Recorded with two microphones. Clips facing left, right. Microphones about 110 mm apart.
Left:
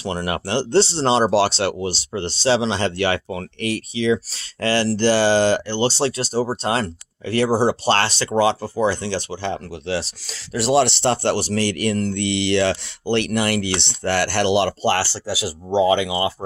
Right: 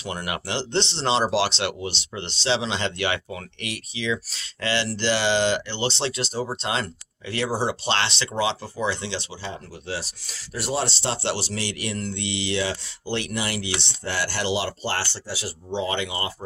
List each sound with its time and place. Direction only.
0.0 s speech: 40° left (ahead or behind)
9.4 s speech: 80° left